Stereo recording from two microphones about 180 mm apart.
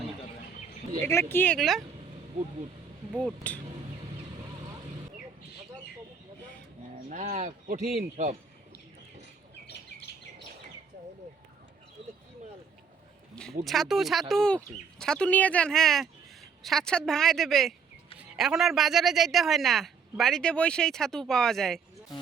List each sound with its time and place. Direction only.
1.0 s speech: 15° left (ahead or behind)
1.5 s speech: centre (ahead or behind)
3.4 s speech: 10° left (ahead or behind)
7.1 s speech: 45° right (ahead or behind)
13.3 s speech: centre (ahead or behind)